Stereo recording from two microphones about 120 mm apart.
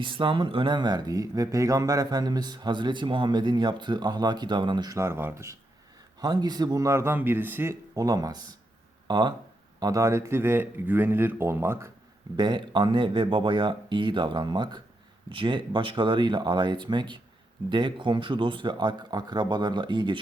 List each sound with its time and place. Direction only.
0.0 s speech: 45° right (ahead or behind)
4.9 s speech: 20° right (ahead or behind)
6.1 s speech: 35° right (ahead or behind)
9.8 s speech: 25° right (ahead or behind)
12.4 s speech: 40° right (ahead or behind)